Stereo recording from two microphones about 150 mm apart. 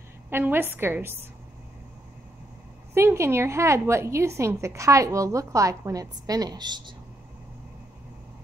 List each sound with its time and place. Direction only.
0.3 s a woman's voice: 15° right (ahead or behind)
2.9 s a woman's voice: 15° right (ahead or behind)